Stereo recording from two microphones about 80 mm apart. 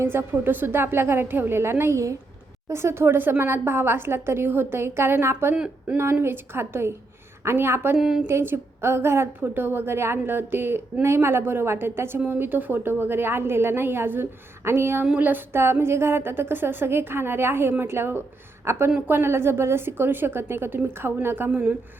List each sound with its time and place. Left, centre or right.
0.0 s a woman's voice: right
5.5 s speech: centre
6.1 s a woman's voice: right
7.9 s a woman's voice: centre
8.3 s a woman's voice: right
21.5 s a woman's voice: centre